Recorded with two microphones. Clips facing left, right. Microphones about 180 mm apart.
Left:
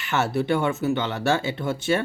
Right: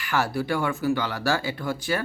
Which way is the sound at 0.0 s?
25° left (ahead or behind).